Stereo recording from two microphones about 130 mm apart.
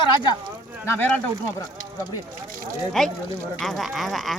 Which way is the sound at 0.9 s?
15° left (ahead or behind).